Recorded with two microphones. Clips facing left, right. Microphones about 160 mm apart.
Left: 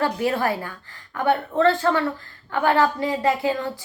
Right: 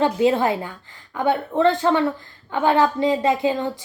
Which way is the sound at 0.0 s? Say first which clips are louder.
Right 4 dB; 20° right (ahead or behind).